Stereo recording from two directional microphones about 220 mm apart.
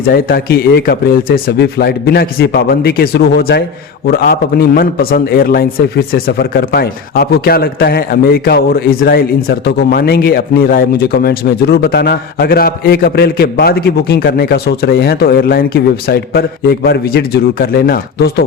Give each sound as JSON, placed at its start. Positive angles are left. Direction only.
{"t": 0.1, "sound": "a man's voice", "side_deg": 45}